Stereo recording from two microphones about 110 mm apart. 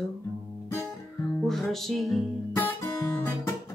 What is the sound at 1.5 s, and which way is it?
Music, centre (ahead or behind).